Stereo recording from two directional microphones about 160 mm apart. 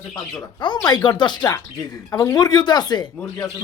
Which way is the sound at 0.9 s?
25° left (ahead or behind).